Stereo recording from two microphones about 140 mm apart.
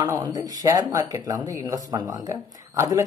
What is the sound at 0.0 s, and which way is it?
Speech, 25° right (ahead or behind).